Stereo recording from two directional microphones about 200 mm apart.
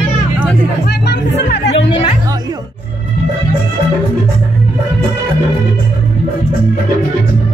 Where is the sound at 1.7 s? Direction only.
25° left (ahead or behind).